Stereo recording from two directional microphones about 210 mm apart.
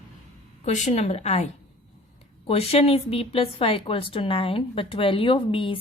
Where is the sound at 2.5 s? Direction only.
30° left (ahead or behind).